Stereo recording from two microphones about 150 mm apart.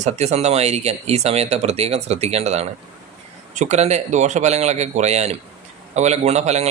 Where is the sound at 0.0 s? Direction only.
45° right (ahead or behind).